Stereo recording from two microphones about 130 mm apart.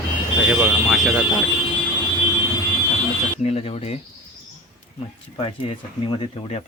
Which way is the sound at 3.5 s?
50° left (ahead or behind).